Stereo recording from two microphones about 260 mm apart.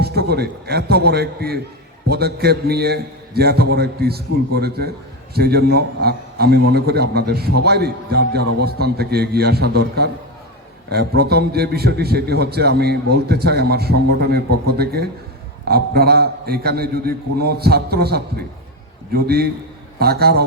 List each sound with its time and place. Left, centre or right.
0.0 s a man's voice: right
11.2 s a man's voice: right